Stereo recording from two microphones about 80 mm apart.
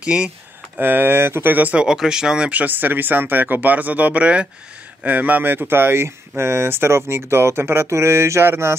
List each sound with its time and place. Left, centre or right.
0.0 s speech: centre
0.7 s speech: right
1.9 s speech: centre; by 8.7 s right